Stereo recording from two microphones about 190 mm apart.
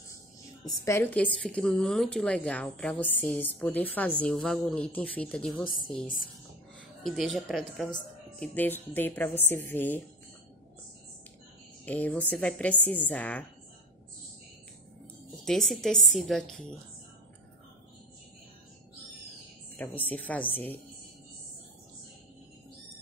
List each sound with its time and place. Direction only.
0.7 s a woman's voice: 15° left (ahead or behind)
7.0 s a woman's voice: centre (ahead or behind)
11.8 s a woman's voice: 5° left (ahead or behind)
15.4 s a woman's voice: centre (ahead or behind)
19.8 s a woman's voice: 10° left (ahead or behind)